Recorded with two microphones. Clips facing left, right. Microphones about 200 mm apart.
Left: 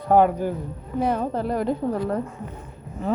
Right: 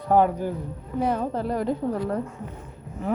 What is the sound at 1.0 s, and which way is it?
A woman's voice, 55° left (ahead or behind).